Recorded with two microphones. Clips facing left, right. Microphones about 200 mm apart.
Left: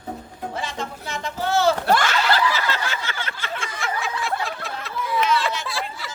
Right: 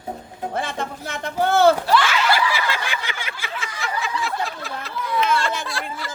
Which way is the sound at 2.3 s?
10° right (ahead or behind).